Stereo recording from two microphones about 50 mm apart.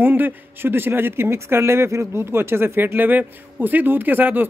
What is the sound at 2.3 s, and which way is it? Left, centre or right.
Speech, right.